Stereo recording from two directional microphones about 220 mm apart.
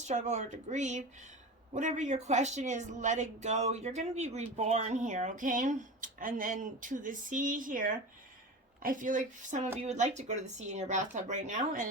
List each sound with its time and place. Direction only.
0.0 s speech: 30° right (ahead or behind)